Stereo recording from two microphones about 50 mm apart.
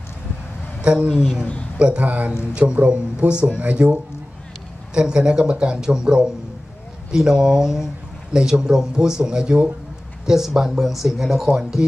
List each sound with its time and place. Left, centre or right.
1.2 s speech: centre
1.8 s speech: right; by 11.4 s centre